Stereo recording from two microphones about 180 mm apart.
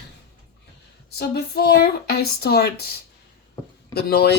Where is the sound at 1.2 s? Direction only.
60° left (ahead or behind).